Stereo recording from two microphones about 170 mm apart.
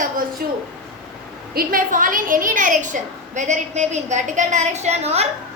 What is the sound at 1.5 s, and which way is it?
A woman's voice, 55° right (ahead or behind).